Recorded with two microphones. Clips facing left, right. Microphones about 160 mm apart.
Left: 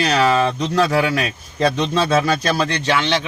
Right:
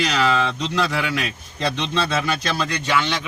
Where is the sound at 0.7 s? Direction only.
40° left (ahead or behind).